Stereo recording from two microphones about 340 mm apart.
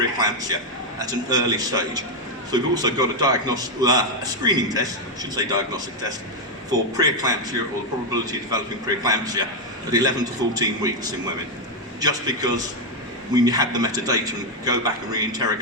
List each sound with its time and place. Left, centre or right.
0.2 s a man's voice: centre